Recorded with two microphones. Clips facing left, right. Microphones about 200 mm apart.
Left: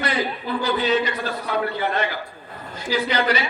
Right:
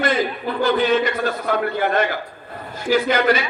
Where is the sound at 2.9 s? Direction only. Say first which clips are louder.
Right 5 dB; 50° right (ahead or behind).